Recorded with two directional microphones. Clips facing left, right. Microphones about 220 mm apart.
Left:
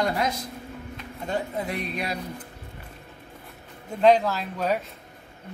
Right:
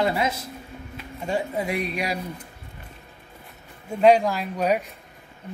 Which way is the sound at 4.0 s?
10° right (ahead or behind).